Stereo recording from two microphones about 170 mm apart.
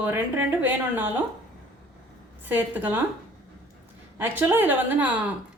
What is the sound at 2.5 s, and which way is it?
Speech, 10° right (ahead or behind).